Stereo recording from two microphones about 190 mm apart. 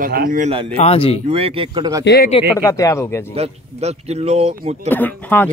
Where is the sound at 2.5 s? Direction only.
15° left (ahead or behind).